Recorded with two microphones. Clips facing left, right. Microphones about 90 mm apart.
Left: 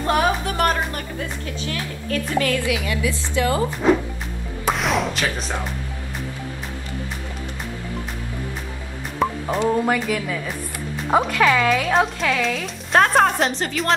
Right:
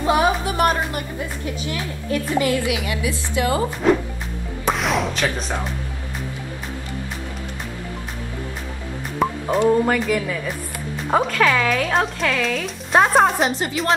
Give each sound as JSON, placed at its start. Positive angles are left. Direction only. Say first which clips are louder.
{"t": 0.0, "sound": "a woman's voice", "louder": "right 2 dB", "side_deg": -10}
{"t": 3.8, "sound": "speech", "louder": "even", "side_deg": 5}
{"t": 4.6, "sound": "music", "louder": "even", "side_deg": 0}
{"t": 9.2, "sound": "music", "louder": "even", "side_deg": 0}
{"t": 9.8, "sound": "speech", "louder": "right 1 dB", "side_deg": 0}